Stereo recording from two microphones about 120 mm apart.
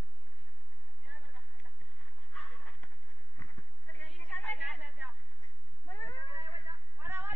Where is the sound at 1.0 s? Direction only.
10° right (ahead or behind).